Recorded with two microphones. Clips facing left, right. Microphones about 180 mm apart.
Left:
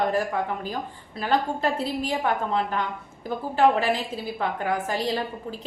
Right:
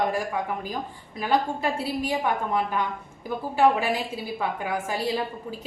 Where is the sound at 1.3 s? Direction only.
10° right (ahead or behind).